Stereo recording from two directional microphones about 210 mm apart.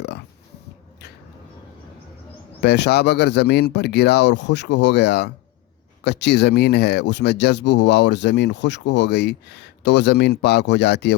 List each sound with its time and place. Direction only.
2.6 s speech: 55° left (ahead or behind)